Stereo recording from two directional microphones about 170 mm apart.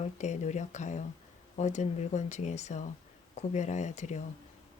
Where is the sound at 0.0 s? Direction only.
45° left (ahead or behind).